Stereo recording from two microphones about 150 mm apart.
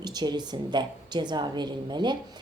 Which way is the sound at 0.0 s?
25° right (ahead or behind).